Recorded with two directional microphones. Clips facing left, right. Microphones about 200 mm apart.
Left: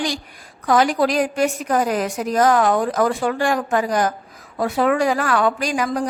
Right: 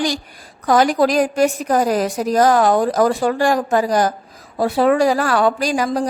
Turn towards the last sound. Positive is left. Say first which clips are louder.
# right 3 dB
turn(degrees=-30)  # may be behind; listen again after turning